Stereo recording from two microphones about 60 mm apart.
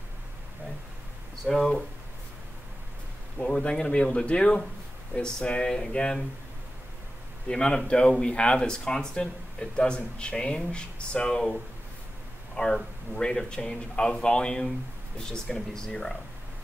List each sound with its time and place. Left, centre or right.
1.4 s speech: centre
3.3 s speech: centre
7.4 s speech: centre